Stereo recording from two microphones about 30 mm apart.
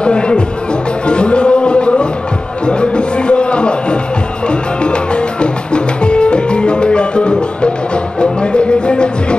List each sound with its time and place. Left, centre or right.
0.0 s music: left